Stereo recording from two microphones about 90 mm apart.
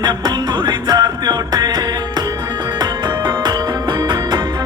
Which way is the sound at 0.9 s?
50° right (ahead or behind).